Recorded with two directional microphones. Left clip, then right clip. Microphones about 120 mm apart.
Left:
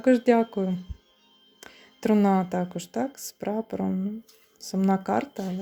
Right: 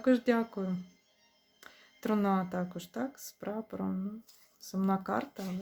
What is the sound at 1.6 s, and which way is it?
Speech, 40° left (ahead or behind).